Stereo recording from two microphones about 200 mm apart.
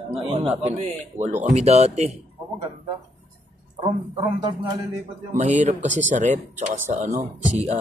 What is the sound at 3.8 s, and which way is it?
A man's voice, 20° right (ahead or behind).